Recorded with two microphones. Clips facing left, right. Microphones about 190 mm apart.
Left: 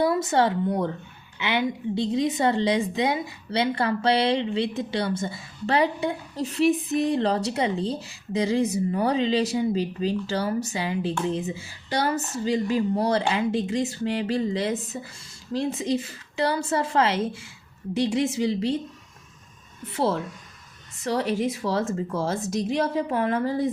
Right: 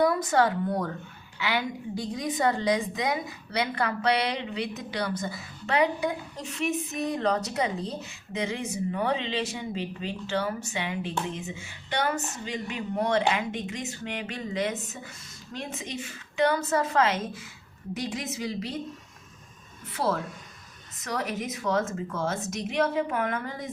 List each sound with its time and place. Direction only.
0.0 s a woman's voice: 25° left (ahead or behind)
19.8 s a woman's voice: 25° left (ahead or behind)